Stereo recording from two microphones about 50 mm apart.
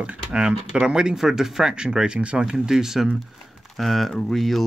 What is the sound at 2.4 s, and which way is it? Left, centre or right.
Speech, centre.